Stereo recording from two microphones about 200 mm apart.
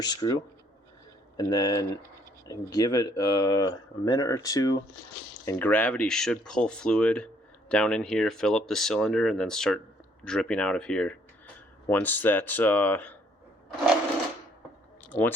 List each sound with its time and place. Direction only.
0.0 s speech: 20° left (ahead or behind)
1.4 s speech: 20° left (ahead or behind)
15.1 s speech: 15° left (ahead or behind)